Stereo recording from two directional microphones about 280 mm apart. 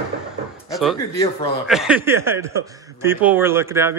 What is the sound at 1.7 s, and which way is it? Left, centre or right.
Speech, centre.